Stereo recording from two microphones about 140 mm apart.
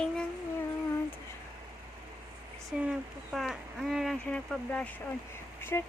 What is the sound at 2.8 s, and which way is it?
Speech, 5° right (ahead or behind).